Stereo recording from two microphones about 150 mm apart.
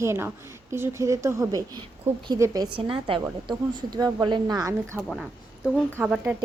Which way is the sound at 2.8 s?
35° right (ahead or behind).